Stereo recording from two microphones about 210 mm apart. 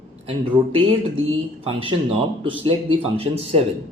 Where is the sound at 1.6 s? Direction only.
25° right (ahead or behind).